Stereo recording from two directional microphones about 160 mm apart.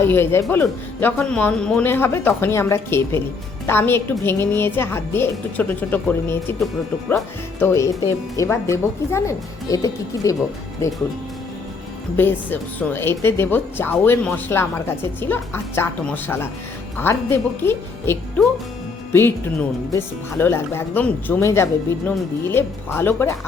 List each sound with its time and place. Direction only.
0.0 s speech: 15° left (ahead or behind)
7.6 s speech: 20° left (ahead or behind)
12.1 s speech: 10° left (ahead or behind)
19.9 s speech: 15° left (ahead or behind)